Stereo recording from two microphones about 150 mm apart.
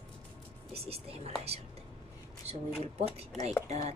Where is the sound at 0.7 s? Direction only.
40° right (ahead or behind).